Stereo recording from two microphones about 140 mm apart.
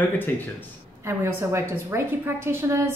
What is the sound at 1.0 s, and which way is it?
A woman's voice, 20° right (ahead or behind).